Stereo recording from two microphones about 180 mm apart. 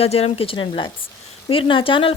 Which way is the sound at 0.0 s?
35° left (ahead or behind).